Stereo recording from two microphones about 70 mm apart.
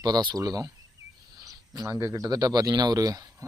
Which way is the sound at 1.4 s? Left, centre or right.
Right.